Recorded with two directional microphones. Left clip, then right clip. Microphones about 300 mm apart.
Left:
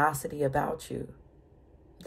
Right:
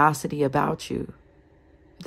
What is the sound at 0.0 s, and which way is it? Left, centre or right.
Speech, centre.